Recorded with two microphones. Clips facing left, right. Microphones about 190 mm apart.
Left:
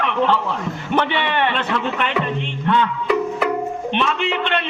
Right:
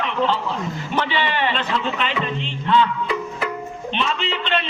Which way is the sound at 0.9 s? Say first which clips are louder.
Left 3 dB; 60° left (ahead or behind).